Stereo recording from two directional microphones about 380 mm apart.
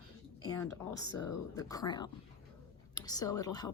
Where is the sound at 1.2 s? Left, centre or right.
Centre.